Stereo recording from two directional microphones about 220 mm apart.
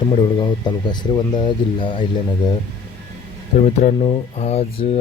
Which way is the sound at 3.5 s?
30° left (ahead or behind).